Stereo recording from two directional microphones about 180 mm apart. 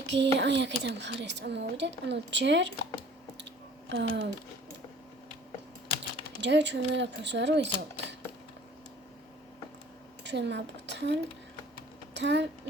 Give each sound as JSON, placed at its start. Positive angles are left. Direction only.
{"t": 0.1, "sound": "a woman's voice", "side_deg": -80}
{"t": 3.8, "sound": "speech", "side_deg": -80}
{"t": 6.4, "sound": "a woman's voice", "side_deg": -75}
{"t": 10.2, "sound": "a woman's voice", "side_deg": -75}